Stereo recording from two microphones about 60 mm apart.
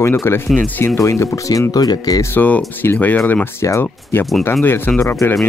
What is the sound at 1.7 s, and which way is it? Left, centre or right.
Speech, left.